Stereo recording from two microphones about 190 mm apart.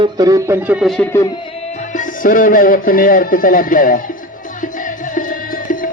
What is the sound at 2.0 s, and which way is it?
Speech, 45° left (ahead or behind).